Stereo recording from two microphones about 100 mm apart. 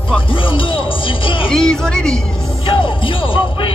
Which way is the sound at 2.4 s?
60° left (ahead or behind).